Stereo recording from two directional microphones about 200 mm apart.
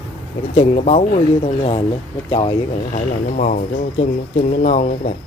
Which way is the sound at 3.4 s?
40° left (ahead or behind).